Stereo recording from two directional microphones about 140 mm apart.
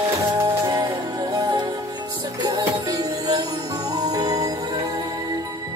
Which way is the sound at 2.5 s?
30° right (ahead or behind).